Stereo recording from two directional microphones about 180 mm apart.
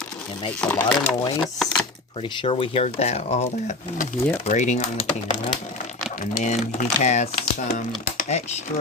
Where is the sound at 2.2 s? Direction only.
30° left (ahead or behind).